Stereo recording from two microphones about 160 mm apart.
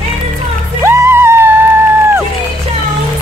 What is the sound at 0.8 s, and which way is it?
Music, 15° right (ahead or behind).